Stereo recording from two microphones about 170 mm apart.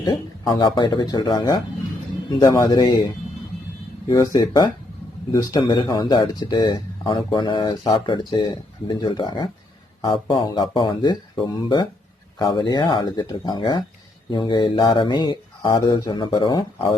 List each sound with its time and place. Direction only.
0.0 s speech: 25° left (ahead or behind)
4.1 s speech: 20° left (ahead or behind)